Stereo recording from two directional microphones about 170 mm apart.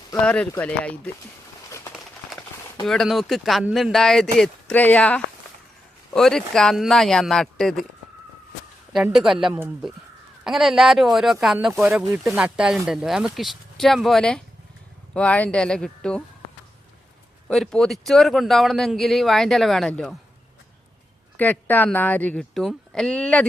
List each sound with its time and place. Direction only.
0.5 s speech: 5° left (ahead or behind)
2.8 s speech: centre (ahead or behind)
9.1 s speech: centre (ahead or behind)
17.5 s speech: centre (ahead or behind)
21.3 s speech: 10° left (ahead or behind)